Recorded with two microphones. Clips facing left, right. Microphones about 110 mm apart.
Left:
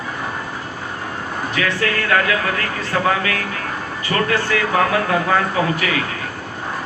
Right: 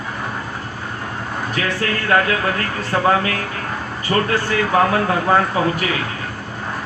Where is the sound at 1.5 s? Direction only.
35° right (ahead or behind).